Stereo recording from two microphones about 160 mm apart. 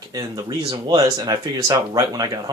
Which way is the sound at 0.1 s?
25° right (ahead or behind).